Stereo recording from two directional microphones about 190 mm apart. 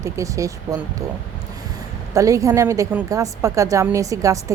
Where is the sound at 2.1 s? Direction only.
15° right (ahead or behind).